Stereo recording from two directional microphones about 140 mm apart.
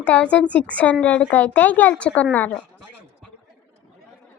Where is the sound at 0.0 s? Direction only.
10° left (ahead or behind).